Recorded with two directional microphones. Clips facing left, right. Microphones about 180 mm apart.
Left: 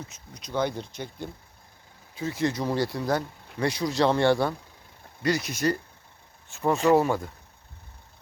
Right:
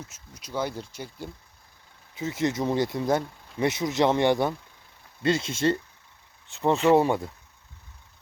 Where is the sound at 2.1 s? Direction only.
20° right (ahead or behind).